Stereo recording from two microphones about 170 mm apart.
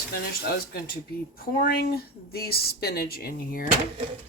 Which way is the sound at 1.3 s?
60° left (ahead or behind).